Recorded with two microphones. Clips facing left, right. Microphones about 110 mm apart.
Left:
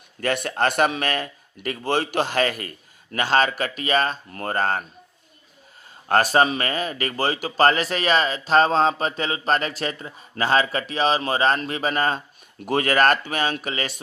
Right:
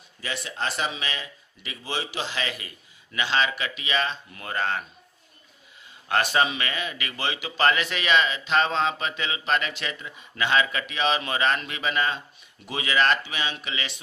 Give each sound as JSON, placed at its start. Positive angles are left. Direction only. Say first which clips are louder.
{"t": 0.2, "sound": "speech", "louder": "left 9 dB", "side_deg": 55}
{"t": 6.0, "sound": "speech", "louder": "left 5 dB", "side_deg": 40}